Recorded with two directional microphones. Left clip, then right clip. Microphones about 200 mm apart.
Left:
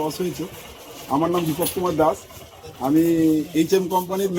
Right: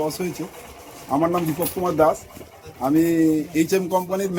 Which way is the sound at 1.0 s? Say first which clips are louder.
Even; 10° right (ahead or behind).